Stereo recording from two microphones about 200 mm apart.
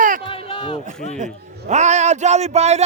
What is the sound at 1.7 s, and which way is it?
Speech, 35° right (ahead or behind).